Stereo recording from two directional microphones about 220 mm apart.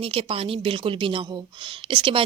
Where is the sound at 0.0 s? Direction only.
25° right (ahead or behind).